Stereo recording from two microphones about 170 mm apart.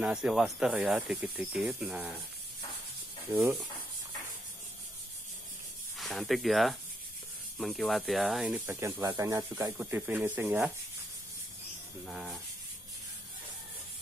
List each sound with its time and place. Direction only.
0.0 s speech: 5° right (ahead or behind)
3.3 s speech: 20° right (ahead or behind)
5.9 s speech: centre (ahead or behind)
8.6 s speech: 15° right (ahead or behind)
12.1 s speech: 5° right (ahead or behind)